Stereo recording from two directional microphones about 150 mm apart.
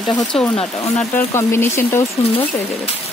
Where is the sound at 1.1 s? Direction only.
15° left (ahead or behind).